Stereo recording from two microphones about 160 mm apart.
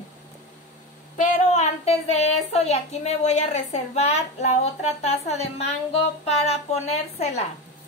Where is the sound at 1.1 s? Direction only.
45° left (ahead or behind).